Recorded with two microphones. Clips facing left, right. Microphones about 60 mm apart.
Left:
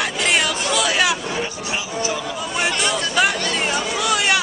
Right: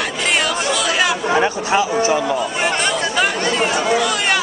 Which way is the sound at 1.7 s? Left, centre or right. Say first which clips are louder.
Right 9 dB; right.